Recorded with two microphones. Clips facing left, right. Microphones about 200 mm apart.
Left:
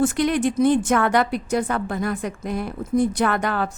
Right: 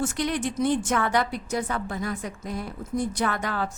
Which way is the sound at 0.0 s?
55° left (ahead or behind).